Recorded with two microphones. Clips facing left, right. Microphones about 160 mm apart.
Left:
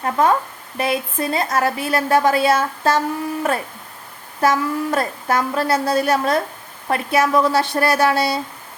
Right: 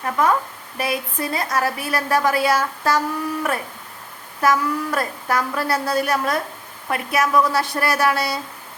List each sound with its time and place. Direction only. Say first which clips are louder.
0.0 s a woman's voice: left 2 dB; 25° left (ahead or behind)
4.4 s a woman's voice: left 1 dB; 25° left (ahead or behind)